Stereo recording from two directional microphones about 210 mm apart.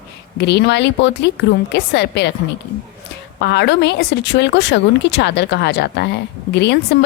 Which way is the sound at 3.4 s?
55° left (ahead or behind).